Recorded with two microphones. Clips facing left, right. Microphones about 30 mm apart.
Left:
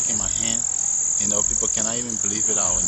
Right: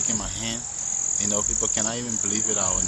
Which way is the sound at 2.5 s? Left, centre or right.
Right.